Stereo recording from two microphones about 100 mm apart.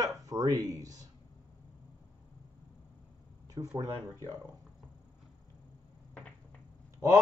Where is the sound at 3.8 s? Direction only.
40° right (ahead or behind).